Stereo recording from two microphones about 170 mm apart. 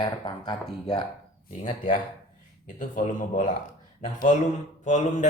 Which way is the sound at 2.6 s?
50° left (ahead or behind).